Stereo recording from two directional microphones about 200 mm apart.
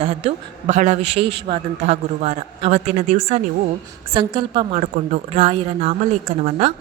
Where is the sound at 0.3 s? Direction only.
35° right (ahead or behind).